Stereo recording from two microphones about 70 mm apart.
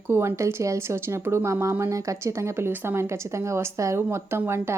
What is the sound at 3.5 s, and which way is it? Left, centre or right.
A woman's voice, right.